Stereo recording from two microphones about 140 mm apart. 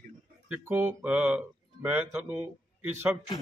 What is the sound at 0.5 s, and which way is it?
Speech, 15° right (ahead or behind).